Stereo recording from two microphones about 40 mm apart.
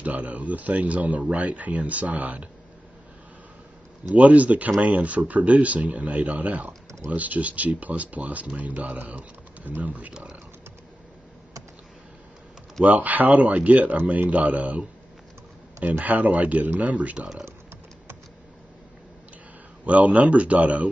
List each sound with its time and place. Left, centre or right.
0.0 s speech: right
4.1 s speech: right
12.8 s speech: right
19.9 s speech: right